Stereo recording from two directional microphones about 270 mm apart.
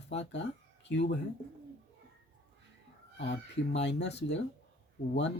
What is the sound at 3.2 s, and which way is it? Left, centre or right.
Speech, left.